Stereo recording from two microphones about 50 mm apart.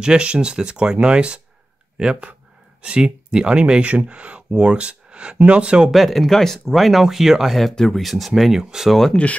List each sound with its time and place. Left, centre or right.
0.0 s speech: centre
5.9 s speech: centre
9.1 s speech: left